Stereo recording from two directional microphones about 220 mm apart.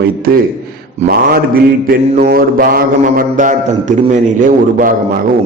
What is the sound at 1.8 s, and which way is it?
Mantra, 40° right (ahead or behind).